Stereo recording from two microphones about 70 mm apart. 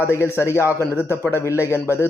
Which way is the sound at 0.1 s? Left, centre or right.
Left.